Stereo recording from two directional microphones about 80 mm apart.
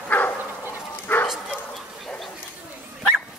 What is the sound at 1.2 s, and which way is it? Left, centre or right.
Bow-wow, centre.